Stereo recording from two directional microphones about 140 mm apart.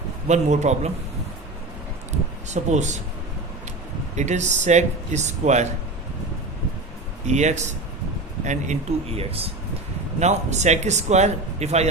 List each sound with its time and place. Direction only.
0.3 s speech: 55° right (ahead or behind)
2.5 s speech: 55° right (ahead or behind)
4.2 s speech: 55° right (ahead or behind)
7.3 s speech: 55° right (ahead or behind)
10.2 s speech: 55° right (ahead or behind)